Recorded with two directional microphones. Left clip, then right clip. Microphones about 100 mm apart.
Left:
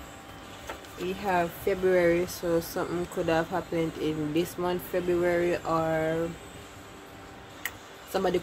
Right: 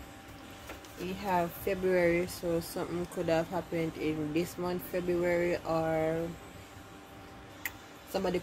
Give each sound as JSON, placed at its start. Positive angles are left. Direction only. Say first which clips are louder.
{"t": 1.2, "sound": "speech", "louder": "left 4 dB", "side_deg": 20}
{"t": 2.2, "sound": "speech", "louder": "left 5 dB", "side_deg": 35}
{"t": 7.6, "sound": "tick-tock", "louder": "left 4 dB", "side_deg": 35}